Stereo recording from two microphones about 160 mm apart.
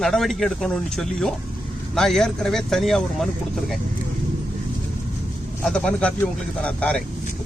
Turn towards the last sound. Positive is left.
turn(degrees=5)  # may be behind; listen again after turning